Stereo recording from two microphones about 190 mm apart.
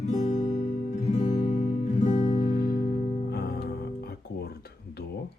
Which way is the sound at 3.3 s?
55° left (ahead or behind).